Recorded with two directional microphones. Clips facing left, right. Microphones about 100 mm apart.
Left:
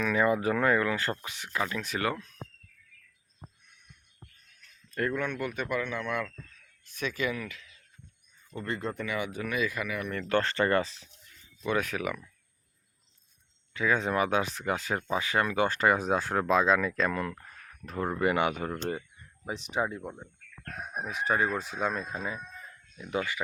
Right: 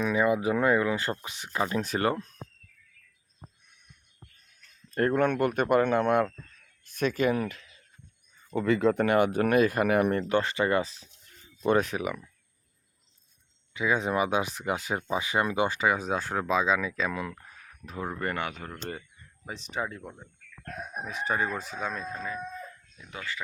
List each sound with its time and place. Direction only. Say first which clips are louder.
0.0 s speech: right 1 dB; 15° right (ahead or behind); by 2.3 s 35° right (ahead or behind)
4.9 s speech: right 6 dB; 40° right (ahead or behind)
8.5 s speech: right 10 dB; 90° right; by 10.1 s 60° right (ahead or behind)
10.2 s speech: right 1 dB; 10° right (ahead or behind)
11.3 s a sound: right 6 dB; 45° right (ahead or behind)
11.8 s speech: right 3 dB; 20° right (ahead or behind)
13.7 s speech: right 1 dB; 15° right (ahead or behind)
15.7 s speech: left 1 dB; centre (ahead or behind)
18.3 s speech: left 6 dB; 20° left (ahead or behind)
18.8 s speech: left 4 dB; 10° left (ahead or behind)